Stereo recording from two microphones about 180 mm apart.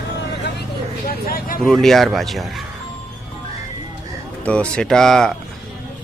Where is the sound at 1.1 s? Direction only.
55° left (ahead or behind).